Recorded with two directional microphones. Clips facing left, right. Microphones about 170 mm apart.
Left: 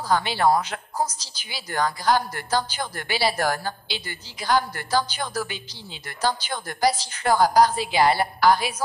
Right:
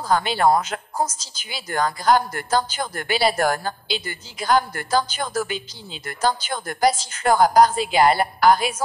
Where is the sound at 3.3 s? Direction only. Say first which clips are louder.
Right 3 dB; 50° right (ahead or behind).